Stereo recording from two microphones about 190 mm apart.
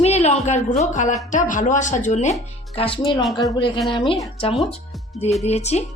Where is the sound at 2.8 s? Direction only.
25° left (ahead or behind).